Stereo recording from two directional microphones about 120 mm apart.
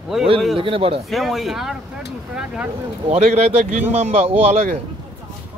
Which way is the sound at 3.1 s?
60° right (ahead or behind).